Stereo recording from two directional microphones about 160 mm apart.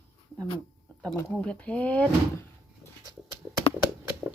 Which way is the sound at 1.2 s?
10° left (ahead or behind).